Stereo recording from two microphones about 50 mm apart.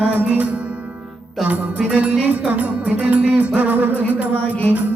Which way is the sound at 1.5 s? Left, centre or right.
Right.